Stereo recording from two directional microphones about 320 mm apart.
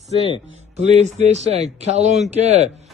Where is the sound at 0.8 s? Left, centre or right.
Right.